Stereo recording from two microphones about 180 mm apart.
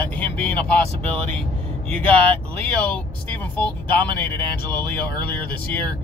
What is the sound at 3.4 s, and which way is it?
Speech, 10° left (ahead or behind).